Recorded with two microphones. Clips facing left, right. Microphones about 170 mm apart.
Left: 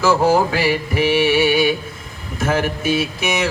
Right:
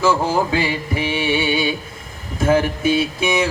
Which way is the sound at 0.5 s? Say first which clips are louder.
Left 2 dB; 25° right (ahead or behind).